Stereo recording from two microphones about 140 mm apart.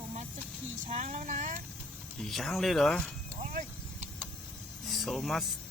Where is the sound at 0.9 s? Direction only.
60° right (ahead or behind).